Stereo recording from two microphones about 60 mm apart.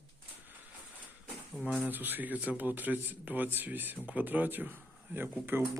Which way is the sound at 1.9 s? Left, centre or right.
Right.